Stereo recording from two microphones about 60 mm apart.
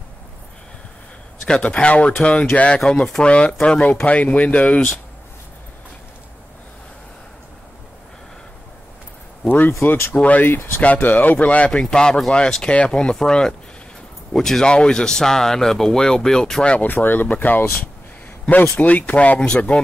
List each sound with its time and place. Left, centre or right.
1.4 s speech: centre
9.8 s speech: left
10.1 s speech: left
10.5 s speech: left
10.8 s speech: left; by 16.7 s centre
16.7 s speech: left; by 19.8 s centre